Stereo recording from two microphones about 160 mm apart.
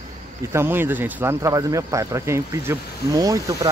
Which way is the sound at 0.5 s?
15° right (ahead or behind).